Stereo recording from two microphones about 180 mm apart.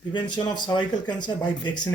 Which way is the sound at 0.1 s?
25° left (ahead or behind).